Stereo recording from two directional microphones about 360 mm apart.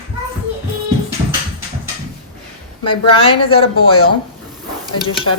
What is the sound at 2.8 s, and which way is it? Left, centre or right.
Speech, centre.